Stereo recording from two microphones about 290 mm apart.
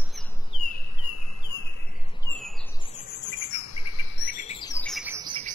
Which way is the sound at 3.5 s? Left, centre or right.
Left.